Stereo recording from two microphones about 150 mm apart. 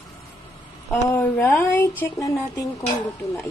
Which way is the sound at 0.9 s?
15° left (ahead or behind).